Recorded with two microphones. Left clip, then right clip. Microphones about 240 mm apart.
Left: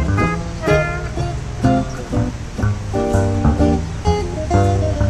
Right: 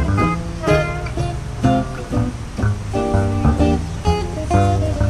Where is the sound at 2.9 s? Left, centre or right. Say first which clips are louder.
Left 2 dB; centre.